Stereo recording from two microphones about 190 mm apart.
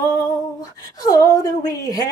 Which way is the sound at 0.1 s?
20° left (ahead or behind).